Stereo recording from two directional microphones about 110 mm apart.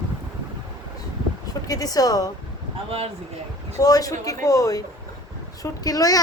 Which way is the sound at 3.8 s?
35° left (ahead or behind).